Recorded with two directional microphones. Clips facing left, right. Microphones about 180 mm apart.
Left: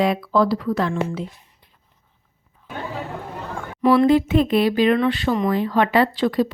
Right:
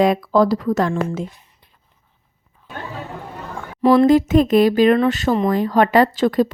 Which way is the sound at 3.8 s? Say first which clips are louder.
Right 3 dB; 40° right (ahead or behind).